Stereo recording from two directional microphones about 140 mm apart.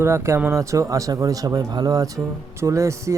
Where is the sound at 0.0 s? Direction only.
20° right (ahead or behind).